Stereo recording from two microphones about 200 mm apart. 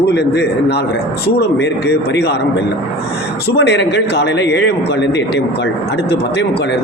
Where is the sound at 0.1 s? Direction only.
55° left (ahead or behind).